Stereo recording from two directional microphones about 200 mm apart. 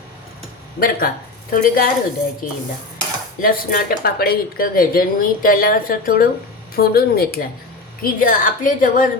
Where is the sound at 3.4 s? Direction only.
45° left (ahead or behind).